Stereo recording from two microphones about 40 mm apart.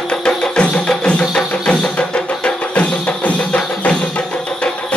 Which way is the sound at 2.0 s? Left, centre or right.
Left.